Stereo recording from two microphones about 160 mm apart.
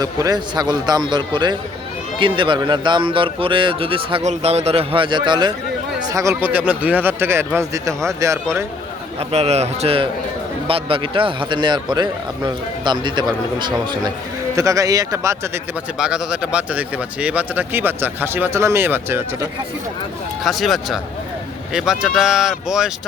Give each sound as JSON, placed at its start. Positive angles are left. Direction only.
{"t": 0.0, "sound": "speech", "side_deg": -25}
{"t": 9.3, "sound": "speech", "side_deg": -40}
{"t": 16.0, "sound": "speech", "side_deg": -5}
{"t": 20.4, "sound": "speech", "side_deg": 0}